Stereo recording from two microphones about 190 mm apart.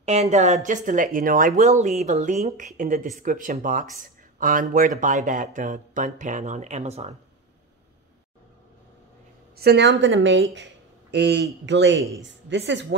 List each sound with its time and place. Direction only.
0.0 s speech: 35° right (ahead or behind)
9.6 s a woman's voice: 60° right (ahead or behind)